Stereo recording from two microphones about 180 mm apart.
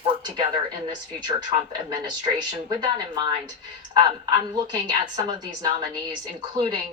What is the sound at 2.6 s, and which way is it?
A woman's voice, 25° right (ahead or behind).